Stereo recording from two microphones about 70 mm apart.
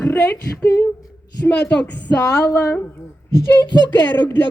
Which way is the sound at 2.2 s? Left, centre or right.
Left.